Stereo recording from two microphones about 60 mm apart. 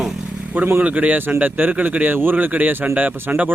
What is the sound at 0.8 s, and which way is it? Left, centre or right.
Speech, right.